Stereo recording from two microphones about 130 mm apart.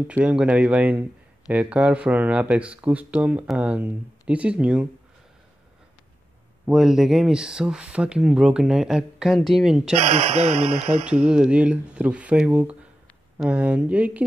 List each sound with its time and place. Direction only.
0.0 s speech: 10° right (ahead or behind)
6.6 s speech: 5° right (ahead or behind)
10.3 s speech: 55° right (ahead or behind)
11.2 s speech: 5° right (ahead or behind)